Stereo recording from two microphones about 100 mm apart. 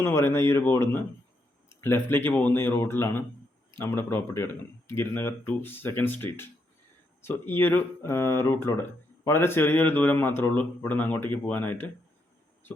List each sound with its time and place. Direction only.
0.0 s speech: 25° left (ahead or behind)